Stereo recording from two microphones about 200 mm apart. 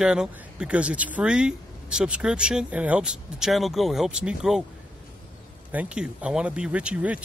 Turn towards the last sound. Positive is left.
turn(degrees=-5)  # may be behind; listen again after turning